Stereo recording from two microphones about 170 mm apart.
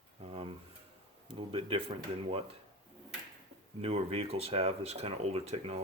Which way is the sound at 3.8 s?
35° right (ahead or behind).